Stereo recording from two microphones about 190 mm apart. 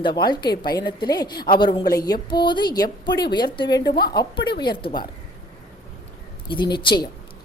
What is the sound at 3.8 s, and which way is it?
Speech, 55° left (ahead or behind).